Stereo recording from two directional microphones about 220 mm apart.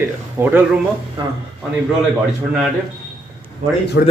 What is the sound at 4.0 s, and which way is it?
Speech, 50° left (ahead or behind).